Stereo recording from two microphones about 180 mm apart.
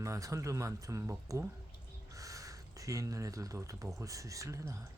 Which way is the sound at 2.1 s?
20° right (ahead or behind).